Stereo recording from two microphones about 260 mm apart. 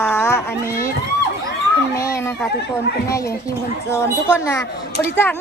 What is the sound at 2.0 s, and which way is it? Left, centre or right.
Baby cry, centre.